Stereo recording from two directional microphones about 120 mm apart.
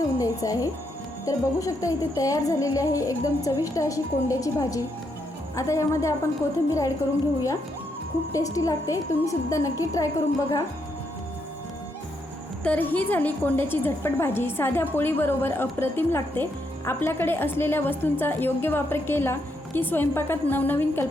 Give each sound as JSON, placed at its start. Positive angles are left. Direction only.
{"t": 0.2, "sound": "speech", "side_deg": 30}
{"t": 8.3, "sound": "speech", "side_deg": 30}
{"t": 12.6, "sound": "a woman's voice", "side_deg": 15}